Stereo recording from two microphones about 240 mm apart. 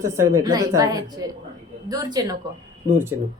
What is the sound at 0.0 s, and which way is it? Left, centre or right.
A woman's voice, centre.